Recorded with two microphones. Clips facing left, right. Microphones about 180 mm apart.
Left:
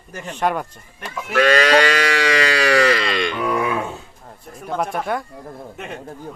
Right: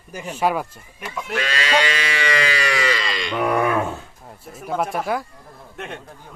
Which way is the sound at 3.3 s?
60° right (ahead or behind).